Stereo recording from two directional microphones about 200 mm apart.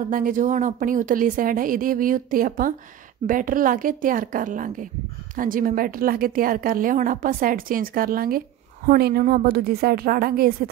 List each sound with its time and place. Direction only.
0.1 s a woman's voice: 40° right (ahead or behind)